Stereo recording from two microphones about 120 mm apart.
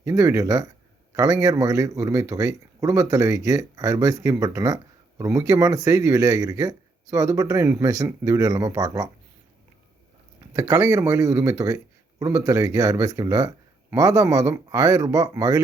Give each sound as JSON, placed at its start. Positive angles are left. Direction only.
{"t": 0.0, "sound": "speech", "side_deg": -25}
{"t": 10.5, "sound": "speech", "side_deg": -30}